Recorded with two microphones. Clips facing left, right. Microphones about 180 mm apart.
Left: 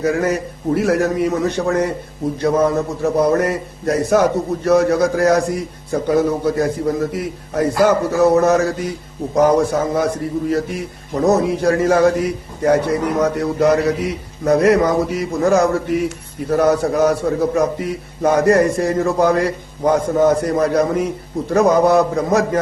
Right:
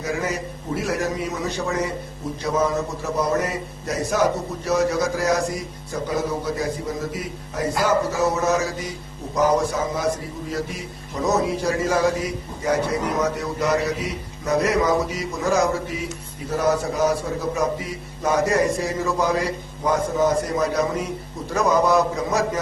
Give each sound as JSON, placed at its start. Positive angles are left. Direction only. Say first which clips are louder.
{"t": 0.0, "sound": "a man's voice", "louder": "left 8 dB", "side_deg": 60}